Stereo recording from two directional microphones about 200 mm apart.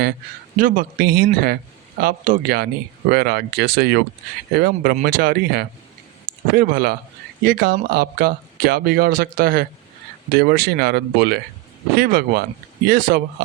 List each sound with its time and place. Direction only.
0.6 s speech: 45° right (ahead or behind)